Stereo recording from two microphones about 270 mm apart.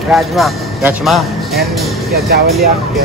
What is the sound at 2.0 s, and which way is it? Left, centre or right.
Speech, right.